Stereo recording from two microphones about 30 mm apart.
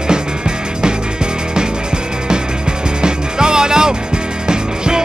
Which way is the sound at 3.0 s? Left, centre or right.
Right.